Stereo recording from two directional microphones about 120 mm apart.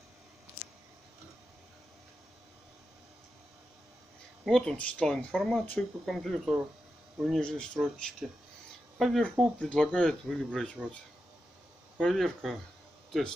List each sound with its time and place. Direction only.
4.5 s speech: 5° left (ahead or behind)
12.0 s speech: centre (ahead or behind)